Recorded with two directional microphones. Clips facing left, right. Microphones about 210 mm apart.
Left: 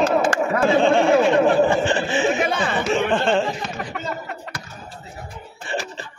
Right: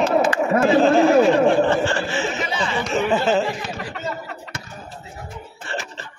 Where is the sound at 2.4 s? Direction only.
55° left (ahead or behind).